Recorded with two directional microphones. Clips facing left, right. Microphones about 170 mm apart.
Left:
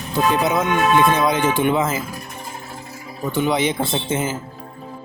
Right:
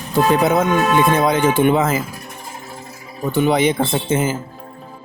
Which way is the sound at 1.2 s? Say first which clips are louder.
Right 3 dB; 55° right (ahead or behind).